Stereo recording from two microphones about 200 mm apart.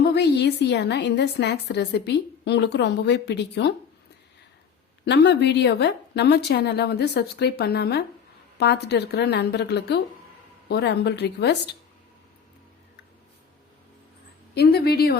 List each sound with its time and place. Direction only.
0.0 s a woman's voice: 55° left (ahead or behind)
5.0 s a woman's voice: 60° left (ahead or behind)
14.5 s a woman's voice: 55° left (ahead or behind)